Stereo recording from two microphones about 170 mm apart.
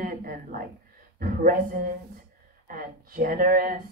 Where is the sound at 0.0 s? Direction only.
55° right (ahead or behind).